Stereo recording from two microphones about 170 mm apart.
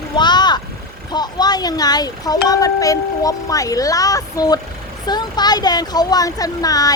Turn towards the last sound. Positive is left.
turn(degrees=20)  # may be behind; listen again after turning